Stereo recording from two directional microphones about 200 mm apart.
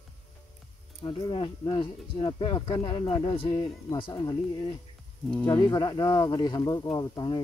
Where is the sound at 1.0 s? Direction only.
25° left (ahead or behind).